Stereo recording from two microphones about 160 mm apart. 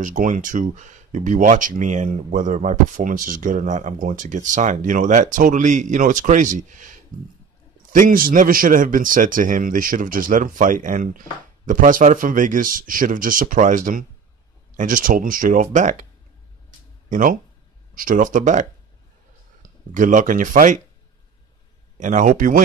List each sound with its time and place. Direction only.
0.0 s a man's voice: 55° right (ahead or behind)
17.1 s a man's voice: 60° right (ahead or behind)
22.0 s a man's voice: 55° right (ahead or behind)